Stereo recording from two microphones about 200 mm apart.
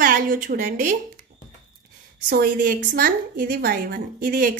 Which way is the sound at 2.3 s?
45° right (ahead or behind).